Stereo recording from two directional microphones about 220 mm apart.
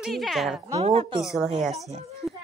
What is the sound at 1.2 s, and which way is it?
Speech, centre (ahead or behind).